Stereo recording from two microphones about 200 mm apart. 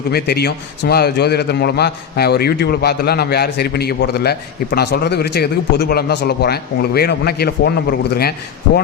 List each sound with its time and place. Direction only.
0.1 s a man's voice: 55° left (ahead or behind)